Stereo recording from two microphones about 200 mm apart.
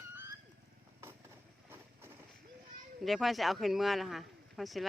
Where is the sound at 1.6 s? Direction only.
10° right (ahead or behind).